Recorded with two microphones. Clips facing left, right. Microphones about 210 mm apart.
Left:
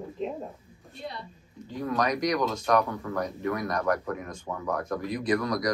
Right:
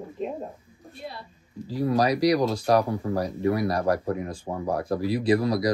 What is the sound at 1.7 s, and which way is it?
Speech, 35° right (ahead or behind).